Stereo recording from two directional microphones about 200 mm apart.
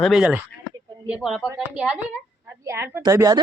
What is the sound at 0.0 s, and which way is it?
A woman's voice, 5° right (ahead or behind).